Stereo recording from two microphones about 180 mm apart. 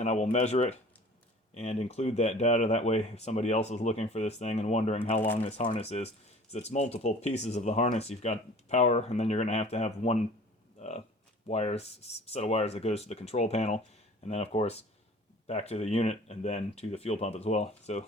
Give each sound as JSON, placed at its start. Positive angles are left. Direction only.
{"t": 0.0, "sound": "speech", "side_deg": 40}
{"t": 10.8, "sound": "a sound", "side_deg": 40}
{"t": 11.4, "sound": "speech", "side_deg": 35}